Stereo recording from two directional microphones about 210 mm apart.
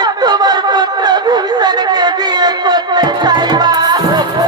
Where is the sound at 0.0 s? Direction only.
20° right (ahead or behind).